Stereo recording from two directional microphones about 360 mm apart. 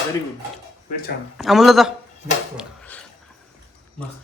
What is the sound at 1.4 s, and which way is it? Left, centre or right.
A woman's voice, centre.